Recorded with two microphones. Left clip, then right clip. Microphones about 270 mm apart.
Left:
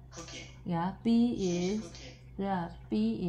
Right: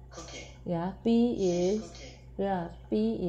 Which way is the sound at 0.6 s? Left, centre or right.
Left.